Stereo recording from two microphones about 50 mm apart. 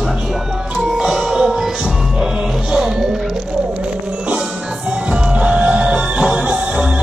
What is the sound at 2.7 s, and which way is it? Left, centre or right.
Music, centre.